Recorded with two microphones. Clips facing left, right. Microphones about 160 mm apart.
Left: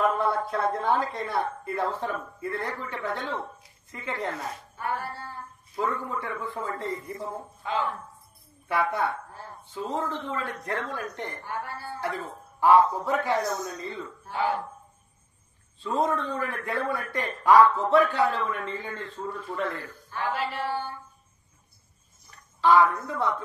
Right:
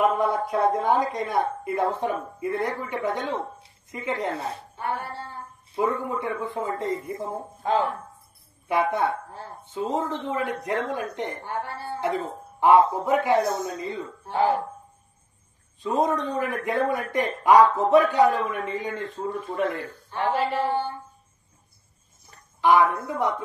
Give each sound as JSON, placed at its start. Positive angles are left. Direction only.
{"t": 0.0, "sound": "a man's voice", "side_deg": -15}
{"t": 8.6, "sound": "a man's voice", "side_deg": -20}
{"t": 13.4, "sound": "a man's voice", "side_deg": -25}
{"t": 13.7, "sound": "a man's voice", "side_deg": -15}
{"t": 14.2, "sound": "speech", "side_deg": -35}
{"t": 15.8, "sound": "a man's voice", "side_deg": -15}
{"t": 20.1, "sound": "a sound", "side_deg": -35}
{"t": 22.6, "sound": "a man's voice", "side_deg": -15}